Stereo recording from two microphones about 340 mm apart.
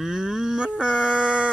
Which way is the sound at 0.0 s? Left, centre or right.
Centre.